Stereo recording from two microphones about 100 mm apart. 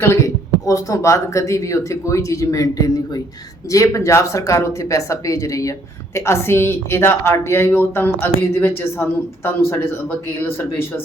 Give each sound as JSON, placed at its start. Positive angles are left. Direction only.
{"t": 0.0, "sound": "a woman's voice", "side_deg": 30}